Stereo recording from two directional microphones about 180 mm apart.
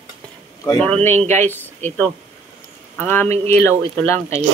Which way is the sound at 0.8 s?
35° right (ahead or behind).